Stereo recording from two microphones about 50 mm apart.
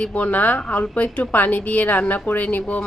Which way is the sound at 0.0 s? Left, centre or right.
Left.